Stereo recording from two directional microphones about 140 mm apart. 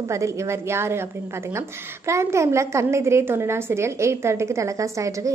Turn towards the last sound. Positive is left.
turn(degrees=-25)  # may be behind; listen again after turning